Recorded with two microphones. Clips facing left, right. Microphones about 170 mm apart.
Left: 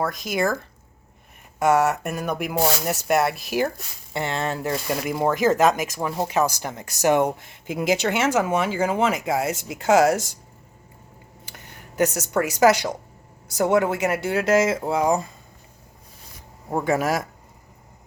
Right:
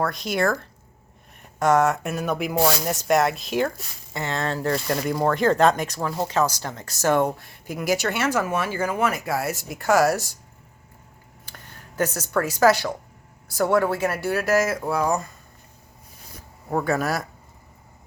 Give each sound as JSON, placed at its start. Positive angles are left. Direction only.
{"t": 0.0, "sound": "speech", "side_deg": 5}
{"t": 1.5, "sound": "speech", "side_deg": 10}
{"t": 4.1, "sound": "speech", "side_deg": 20}
{"t": 6.1, "sound": "speech", "side_deg": 15}
{"t": 11.4, "sound": "speech", "side_deg": 15}
{"t": 16.7, "sound": "speech", "side_deg": 15}